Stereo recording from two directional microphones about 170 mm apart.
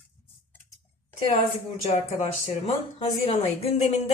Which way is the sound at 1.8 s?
35° left (ahead or behind).